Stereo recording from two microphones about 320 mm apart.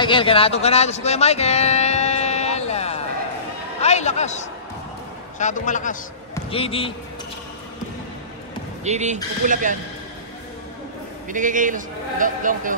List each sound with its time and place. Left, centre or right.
0.0 s a man's voice: centre
8.8 s a man's voice: right
11.2 s a man's voice: right